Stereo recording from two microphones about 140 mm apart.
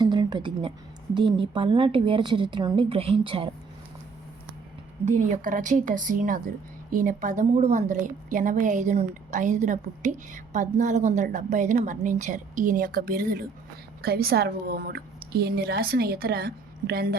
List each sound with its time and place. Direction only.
0.0 s a sound: 30° right (ahead or behind)
1.1 s a woman's voice: 35° right (ahead or behind)
5.0 s a woman's voice: 60° right (ahead or behind); by 17.2 s 90° right